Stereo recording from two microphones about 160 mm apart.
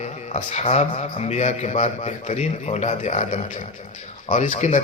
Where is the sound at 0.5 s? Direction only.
45° left (ahead or behind).